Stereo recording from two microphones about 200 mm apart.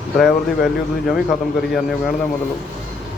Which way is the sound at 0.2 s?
Centre (ahead or behind).